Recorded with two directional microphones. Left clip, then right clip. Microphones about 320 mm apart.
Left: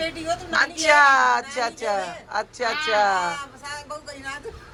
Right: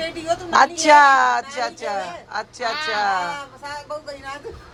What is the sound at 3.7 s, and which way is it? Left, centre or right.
Speech, right.